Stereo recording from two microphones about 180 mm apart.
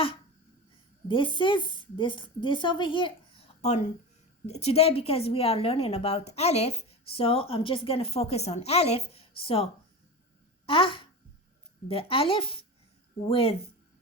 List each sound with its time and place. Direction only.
1.0 s a woman's voice: 30° left (ahead or behind)
10.7 s a woman's voice: 30° left (ahead or behind)